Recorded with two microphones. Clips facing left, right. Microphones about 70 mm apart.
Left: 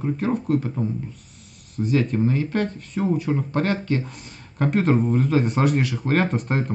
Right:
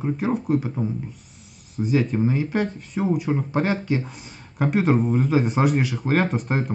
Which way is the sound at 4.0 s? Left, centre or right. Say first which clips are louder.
Even; centre.